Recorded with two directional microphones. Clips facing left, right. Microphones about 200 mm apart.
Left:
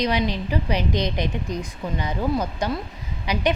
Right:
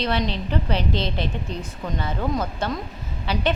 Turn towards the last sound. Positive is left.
turn(degrees=15)  # may be behind; listen again after turning